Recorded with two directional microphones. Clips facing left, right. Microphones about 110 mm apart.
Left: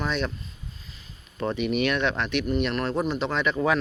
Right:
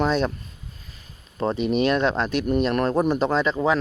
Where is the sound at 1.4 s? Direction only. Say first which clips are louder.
Right 4 dB; 35° right (ahead or behind).